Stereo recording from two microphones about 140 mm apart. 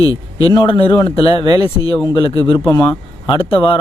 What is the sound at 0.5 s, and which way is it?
Speech, 35° left (ahead or behind).